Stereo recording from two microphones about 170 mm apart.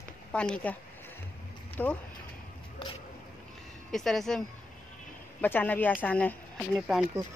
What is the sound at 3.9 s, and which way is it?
Speech, centre (ahead or behind).